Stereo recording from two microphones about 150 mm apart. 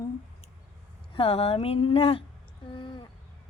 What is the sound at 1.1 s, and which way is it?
Speech, 40° left (ahead or behind).